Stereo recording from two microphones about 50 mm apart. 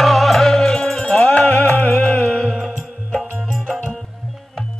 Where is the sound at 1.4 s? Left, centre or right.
Left.